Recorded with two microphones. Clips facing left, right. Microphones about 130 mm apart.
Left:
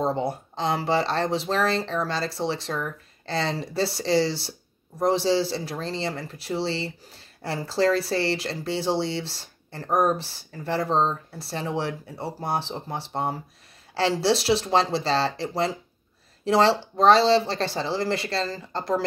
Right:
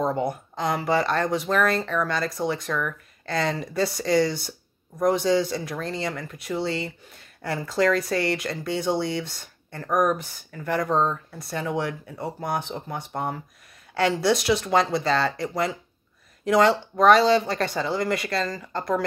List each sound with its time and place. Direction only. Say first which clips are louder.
0.0 s speech: even; 30° left (ahead or behind)